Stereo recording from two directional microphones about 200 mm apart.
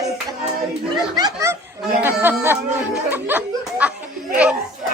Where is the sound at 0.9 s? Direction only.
20° right (ahead or behind).